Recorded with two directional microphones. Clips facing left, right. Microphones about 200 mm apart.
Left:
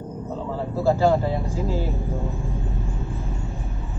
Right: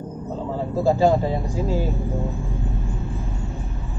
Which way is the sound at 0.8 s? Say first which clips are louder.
Right 1 dB; 15° right (ahead or behind).